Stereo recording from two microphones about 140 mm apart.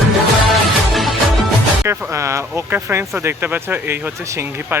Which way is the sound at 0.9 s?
Centre (ahead or behind).